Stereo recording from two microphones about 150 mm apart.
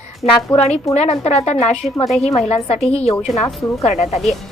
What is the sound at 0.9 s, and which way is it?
Speech, 45° left (ahead or behind).